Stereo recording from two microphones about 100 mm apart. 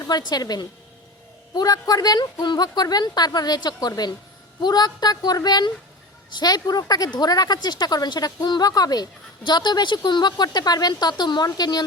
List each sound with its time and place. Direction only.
0.0 s a woman's voice: 45° left (ahead or behind)